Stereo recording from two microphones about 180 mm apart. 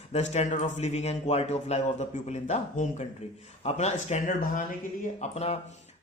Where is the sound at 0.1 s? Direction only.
40° left (ahead or behind).